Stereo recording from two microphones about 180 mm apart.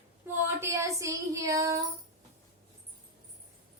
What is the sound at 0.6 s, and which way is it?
Child singing, 15° right (ahead or behind).